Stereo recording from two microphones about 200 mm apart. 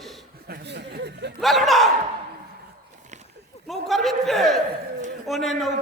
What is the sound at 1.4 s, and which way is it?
Speech, centre (ahead or behind).